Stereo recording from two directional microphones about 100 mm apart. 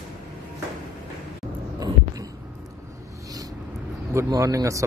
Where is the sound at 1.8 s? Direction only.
40° right (ahead or behind).